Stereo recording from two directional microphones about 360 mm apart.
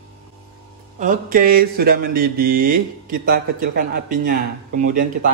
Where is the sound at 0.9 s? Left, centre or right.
Right.